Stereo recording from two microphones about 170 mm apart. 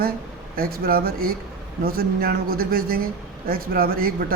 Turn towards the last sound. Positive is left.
turn(degrees=-60)  # may be behind; listen again after turning